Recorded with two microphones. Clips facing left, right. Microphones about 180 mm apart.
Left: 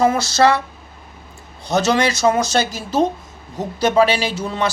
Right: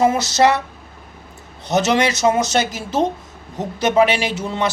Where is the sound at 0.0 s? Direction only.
20° right (ahead or behind).